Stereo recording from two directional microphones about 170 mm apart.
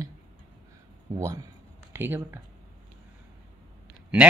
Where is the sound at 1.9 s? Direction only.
15° right (ahead or behind).